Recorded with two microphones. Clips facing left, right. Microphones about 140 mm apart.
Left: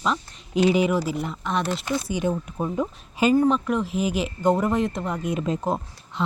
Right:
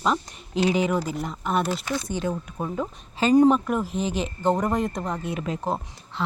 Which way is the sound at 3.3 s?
15° right (ahead or behind).